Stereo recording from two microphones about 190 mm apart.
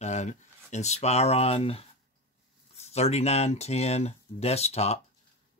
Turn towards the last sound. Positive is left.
turn(degrees=35)  # may be behind; listen again after turning